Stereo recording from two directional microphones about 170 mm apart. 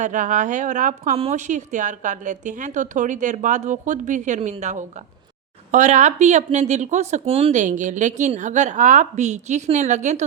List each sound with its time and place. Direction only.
0.0 s speech: 50° right (ahead or behind)